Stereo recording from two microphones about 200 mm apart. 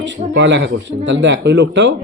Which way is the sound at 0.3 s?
65° right (ahead or behind).